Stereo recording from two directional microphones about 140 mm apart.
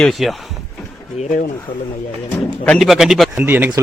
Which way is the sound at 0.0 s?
Centre (ahead or behind).